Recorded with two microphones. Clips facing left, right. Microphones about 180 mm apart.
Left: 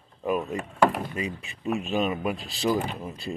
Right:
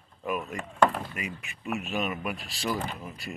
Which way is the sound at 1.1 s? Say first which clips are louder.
Left 6 dB; 30° left (ahead or behind).